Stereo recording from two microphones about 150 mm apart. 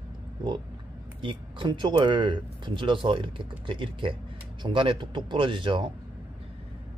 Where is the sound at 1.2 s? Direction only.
35° right (ahead or behind).